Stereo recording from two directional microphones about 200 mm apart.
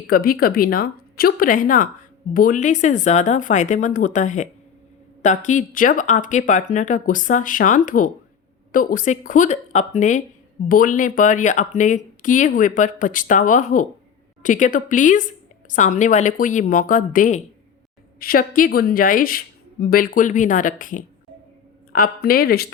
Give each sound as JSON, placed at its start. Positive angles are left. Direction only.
{"t": 0.1, "sound": "speech", "side_deg": 45}